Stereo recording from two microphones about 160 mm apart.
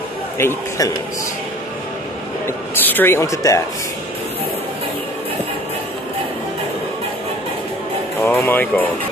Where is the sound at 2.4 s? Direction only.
10° left (ahead or behind).